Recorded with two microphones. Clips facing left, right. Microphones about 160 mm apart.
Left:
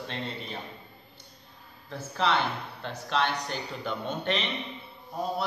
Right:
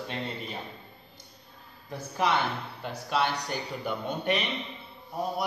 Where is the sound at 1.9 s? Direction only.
15° right (ahead or behind).